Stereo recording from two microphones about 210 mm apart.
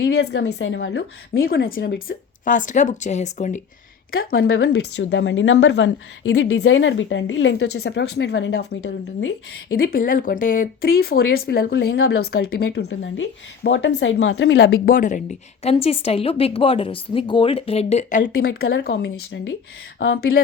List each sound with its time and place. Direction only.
0.0 s a woman's voice: 50° left (ahead or behind); by 3.6 s 35° left (ahead or behind)
4.1 s a woman's voice: 45° left (ahead or behind)
4.6 s a woman's voice: 60° left (ahead or behind)
12.6 s a woman's voice: 60° left (ahead or behind)
14.8 s speech: 40° left (ahead or behind)
18.3 s a woman's voice: 45° left (ahead or behind)
20.1 s a woman's voice: 45° left (ahead or behind)